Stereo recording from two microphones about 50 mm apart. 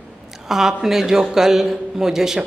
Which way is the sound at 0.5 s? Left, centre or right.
Centre.